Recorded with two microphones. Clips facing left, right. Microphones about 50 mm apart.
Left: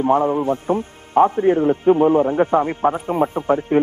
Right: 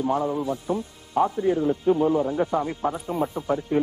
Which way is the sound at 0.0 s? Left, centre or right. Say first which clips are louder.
Left 7 dB; left.